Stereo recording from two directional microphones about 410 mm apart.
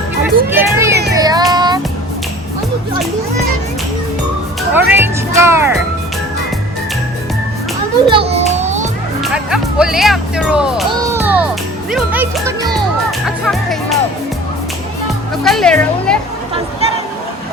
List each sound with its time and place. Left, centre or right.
0.3 s music: centre
4.7 s music: centre
8.1 s children playing: centre
9.2 s music: centre
15.4 s speech: centre